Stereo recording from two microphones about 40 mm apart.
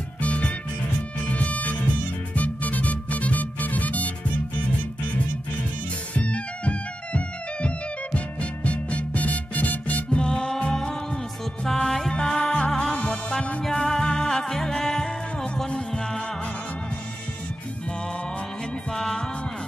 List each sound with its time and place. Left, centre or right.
0.2 s music: left
6.1 s music: left
10.1 s music: left
12.1 s music: left
18.9 s music: centre